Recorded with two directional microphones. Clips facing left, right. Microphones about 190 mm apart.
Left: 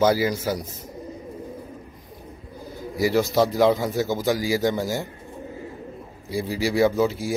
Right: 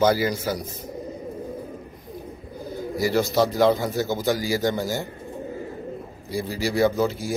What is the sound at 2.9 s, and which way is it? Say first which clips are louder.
Speech: left 1 dB; centre (ahead or behind).